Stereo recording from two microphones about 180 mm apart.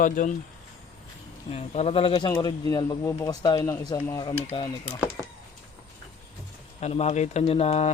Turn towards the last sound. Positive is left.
turn(degrees=35)  # may be behind; listen again after turning